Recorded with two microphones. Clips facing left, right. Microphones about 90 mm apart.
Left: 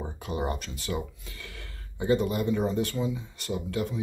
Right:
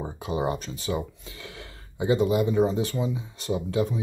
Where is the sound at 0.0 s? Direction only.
15° right (ahead or behind).